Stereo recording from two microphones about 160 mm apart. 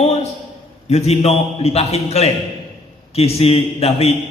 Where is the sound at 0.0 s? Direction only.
40° left (ahead or behind).